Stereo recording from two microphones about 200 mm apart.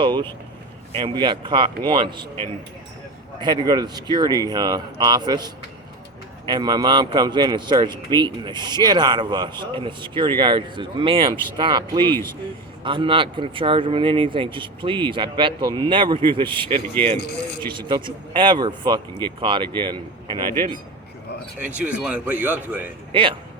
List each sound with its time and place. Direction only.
0.0 s a man's voice: 20° right (ahead or behind)
3.4 s a man's voice: 20° right (ahead or behind)
6.5 s a man's voice: 20° right (ahead or behind)
17.7 s a man's voice: 25° right (ahead or behind)
21.6 s speech: 5° right (ahead or behind)
23.1 s a man's voice: 25° right (ahead or behind)